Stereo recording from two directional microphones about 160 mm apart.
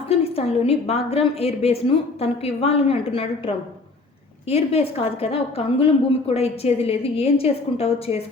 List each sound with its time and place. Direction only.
0.1 s a woman's voice: 40° left (ahead or behind)